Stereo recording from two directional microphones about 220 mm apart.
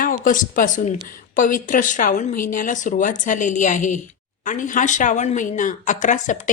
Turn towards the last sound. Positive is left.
turn(degrees=35)  # may be behind; listen again after turning